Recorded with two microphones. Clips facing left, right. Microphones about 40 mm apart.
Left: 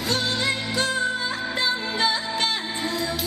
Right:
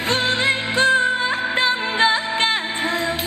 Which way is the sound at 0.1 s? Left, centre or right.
Right.